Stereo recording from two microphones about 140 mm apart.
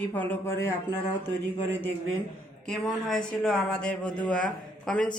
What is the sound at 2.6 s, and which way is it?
Speech, 5° left (ahead or behind).